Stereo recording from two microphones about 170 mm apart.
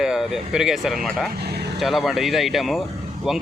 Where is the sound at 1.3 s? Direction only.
70° right (ahead or behind).